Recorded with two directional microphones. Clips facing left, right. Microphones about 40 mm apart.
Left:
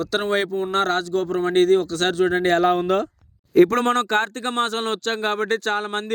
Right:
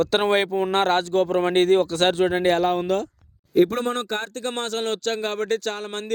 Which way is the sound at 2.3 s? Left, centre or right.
Centre.